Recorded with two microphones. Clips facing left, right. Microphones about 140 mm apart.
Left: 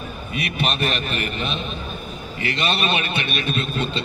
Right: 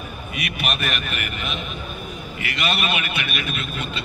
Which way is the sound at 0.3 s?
30° left (ahead or behind).